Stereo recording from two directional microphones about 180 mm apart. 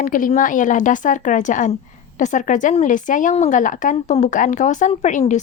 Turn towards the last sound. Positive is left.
turn(degrees=45)  # may be behind; listen again after turning